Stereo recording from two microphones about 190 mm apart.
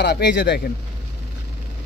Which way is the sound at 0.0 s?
65° left (ahead or behind).